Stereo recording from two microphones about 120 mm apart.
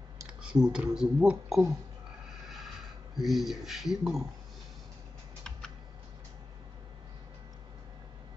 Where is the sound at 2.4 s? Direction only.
Centre (ahead or behind).